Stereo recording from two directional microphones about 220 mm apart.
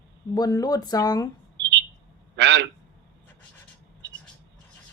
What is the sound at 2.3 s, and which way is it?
Speech, 55° right (ahead or behind).